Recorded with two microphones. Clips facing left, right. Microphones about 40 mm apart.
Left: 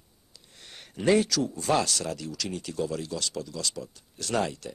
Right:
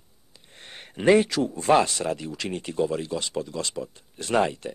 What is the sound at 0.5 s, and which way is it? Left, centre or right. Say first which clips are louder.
Speech: right 4 dB; right.